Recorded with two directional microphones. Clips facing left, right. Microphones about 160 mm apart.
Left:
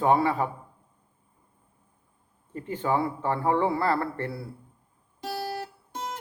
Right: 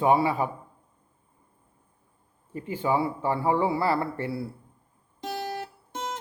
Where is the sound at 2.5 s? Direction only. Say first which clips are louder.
Right 1 dB; 10° right (ahead or behind).